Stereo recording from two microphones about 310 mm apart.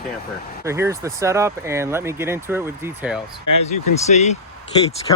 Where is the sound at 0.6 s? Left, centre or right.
Centre.